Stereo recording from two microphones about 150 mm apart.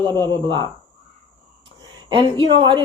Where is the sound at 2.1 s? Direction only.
35° right (ahead or behind).